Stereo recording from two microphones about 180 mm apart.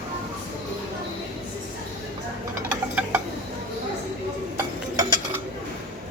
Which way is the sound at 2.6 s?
10° right (ahead or behind).